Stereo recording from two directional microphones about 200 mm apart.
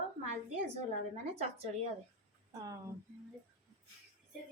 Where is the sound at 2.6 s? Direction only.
15° right (ahead or behind).